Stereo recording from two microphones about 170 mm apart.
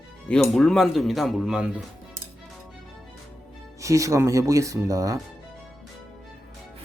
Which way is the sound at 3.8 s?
20° right (ahead or behind).